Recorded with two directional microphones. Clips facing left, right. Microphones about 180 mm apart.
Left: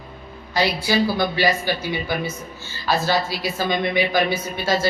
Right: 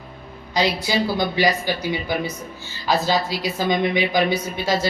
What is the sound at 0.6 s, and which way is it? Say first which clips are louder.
A woman's voice: left 1 dB; 20° right (ahead or behind).